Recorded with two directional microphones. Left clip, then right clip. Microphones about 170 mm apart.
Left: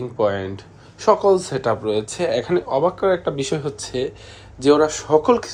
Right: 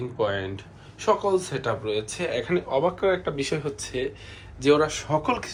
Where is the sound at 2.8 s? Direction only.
25° left (ahead or behind).